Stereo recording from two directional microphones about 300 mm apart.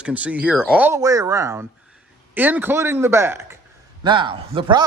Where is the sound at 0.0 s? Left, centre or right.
Centre.